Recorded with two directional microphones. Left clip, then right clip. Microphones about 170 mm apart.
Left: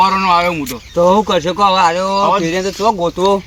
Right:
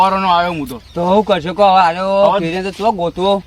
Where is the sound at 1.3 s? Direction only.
50° right (ahead or behind).